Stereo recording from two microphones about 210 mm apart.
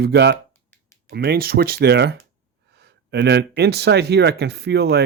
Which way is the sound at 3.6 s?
50° right (ahead or behind).